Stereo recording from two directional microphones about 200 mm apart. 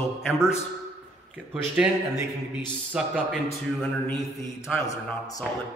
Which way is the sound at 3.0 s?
5° right (ahead or behind).